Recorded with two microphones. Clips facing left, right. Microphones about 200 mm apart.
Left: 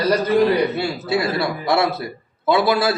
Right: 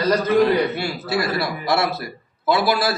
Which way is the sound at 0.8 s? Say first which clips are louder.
Left 2 dB; 25° left (ahead or behind).